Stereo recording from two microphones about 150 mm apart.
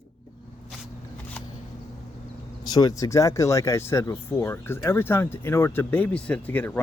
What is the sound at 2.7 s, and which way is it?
Speech, 25° left (ahead or behind).